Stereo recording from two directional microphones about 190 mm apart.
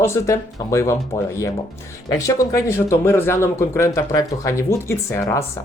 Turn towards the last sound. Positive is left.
turn(degrees=15)  # may be behind; listen again after turning